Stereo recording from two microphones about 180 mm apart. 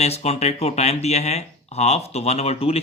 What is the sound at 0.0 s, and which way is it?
Speech, 35° left (ahead or behind).